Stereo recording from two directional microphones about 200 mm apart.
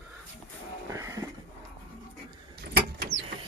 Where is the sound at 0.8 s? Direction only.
15° right (ahead or behind).